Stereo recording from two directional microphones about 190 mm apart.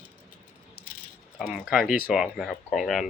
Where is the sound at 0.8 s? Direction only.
55° left (ahead or behind).